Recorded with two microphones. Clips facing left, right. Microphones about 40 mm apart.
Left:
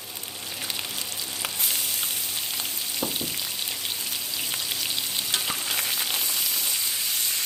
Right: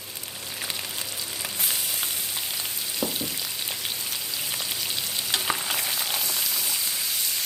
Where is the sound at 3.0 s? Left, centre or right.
Left.